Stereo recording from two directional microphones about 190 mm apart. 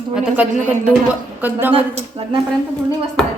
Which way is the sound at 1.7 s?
30° right (ahead or behind).